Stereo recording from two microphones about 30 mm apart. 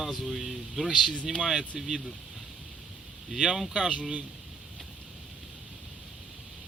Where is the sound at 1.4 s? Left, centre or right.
Centre.